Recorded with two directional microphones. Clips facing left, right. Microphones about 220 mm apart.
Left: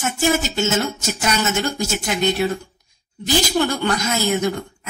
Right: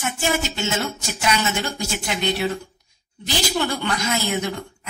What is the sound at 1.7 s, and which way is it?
Speech, 45° left (ahead or behind).